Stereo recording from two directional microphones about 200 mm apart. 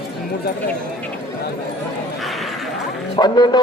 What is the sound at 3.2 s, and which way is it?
Speech, 20° left (ahead or behind).